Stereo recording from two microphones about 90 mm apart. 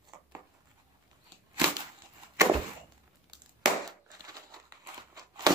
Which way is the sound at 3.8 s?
45° right (ahead or behind).